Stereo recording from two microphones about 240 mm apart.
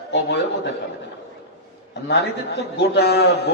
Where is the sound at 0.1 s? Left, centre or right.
Left.